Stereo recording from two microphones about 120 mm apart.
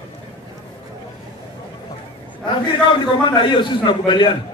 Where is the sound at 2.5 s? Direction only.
40° left (ahead or behind).